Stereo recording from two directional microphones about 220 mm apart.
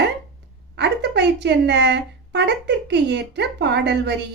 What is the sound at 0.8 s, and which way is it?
A woman's voice, 50° right (ahead or behind).